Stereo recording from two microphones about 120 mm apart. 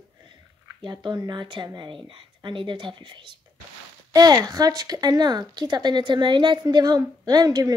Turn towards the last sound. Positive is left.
turn(degrees=-30)  # may be behind; listen again after turning